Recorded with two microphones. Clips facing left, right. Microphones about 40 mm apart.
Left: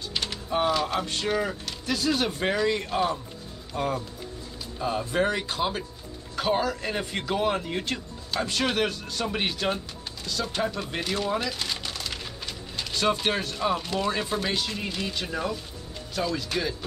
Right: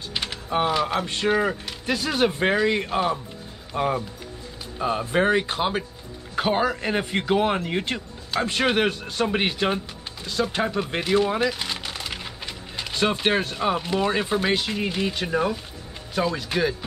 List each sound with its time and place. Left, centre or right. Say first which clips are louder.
0.1 s speech: right 2 dB; centre